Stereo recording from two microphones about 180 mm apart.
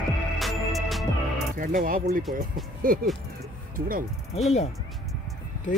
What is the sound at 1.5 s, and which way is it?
Speech, 50° right (ahead or behind).